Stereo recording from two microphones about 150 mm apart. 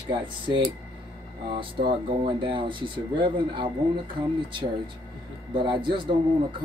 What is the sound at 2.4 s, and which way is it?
Speech, 35° right (ahead or behind).